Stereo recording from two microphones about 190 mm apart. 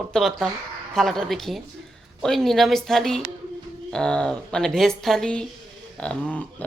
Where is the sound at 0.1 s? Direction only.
Centre (ahead or behind).